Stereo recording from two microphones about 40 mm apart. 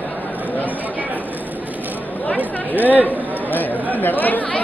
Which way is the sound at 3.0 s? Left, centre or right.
Left.